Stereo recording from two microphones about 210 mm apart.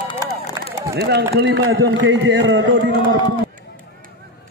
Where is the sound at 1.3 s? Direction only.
55° right (ahead or behind).